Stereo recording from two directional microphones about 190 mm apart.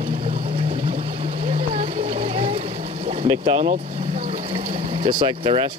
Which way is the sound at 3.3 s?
30° right (ahead or behind).